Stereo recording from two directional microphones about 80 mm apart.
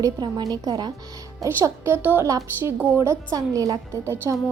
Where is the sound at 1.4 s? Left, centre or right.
Right.